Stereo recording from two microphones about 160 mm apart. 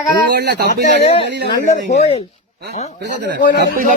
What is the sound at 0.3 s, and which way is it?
Speech, 90° right.